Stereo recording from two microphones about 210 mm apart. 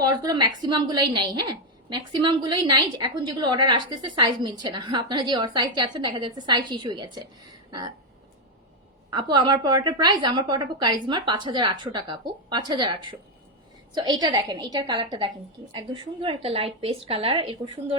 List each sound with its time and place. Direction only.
0.0 s a woman's voice: 15° right (ahead or behind)
9.0 s a woman's voice: 20° right (ahead or behind)